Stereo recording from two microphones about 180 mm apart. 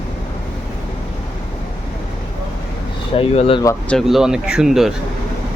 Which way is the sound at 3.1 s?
30° left (ahead or behind).